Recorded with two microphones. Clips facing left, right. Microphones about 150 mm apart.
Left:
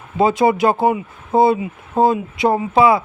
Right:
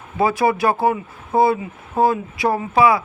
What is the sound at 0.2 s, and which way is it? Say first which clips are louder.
Speech: left 3 dB; 20° left (ahead or behind).